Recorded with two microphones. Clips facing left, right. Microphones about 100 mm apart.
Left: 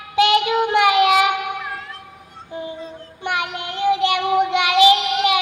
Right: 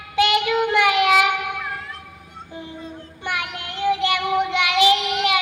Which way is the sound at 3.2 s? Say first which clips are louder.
Left 4 dB; 20° left (ahead or behind).